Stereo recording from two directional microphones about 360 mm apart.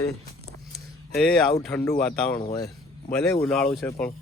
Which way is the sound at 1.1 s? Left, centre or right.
Centre.